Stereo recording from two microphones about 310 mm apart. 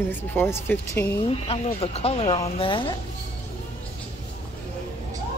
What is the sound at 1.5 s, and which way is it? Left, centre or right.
Speech, centre.